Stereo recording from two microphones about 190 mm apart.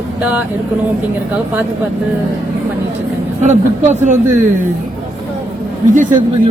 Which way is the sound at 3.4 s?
40° right (ahead or behind).